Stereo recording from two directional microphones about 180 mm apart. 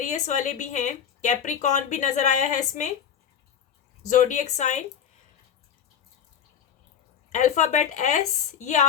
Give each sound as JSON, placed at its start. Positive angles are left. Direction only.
{"t": 0.0, "sound": "speech", "side_deg": 40}
{"t": 4.1, "sound": "speech", "side_deg": 45}
{"t": 7.3, "sound": "speech", "side_deg": 40}